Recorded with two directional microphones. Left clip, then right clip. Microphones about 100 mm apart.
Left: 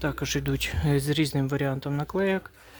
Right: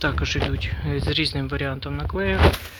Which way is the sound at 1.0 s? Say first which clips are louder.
Right 5 dB; 90° left.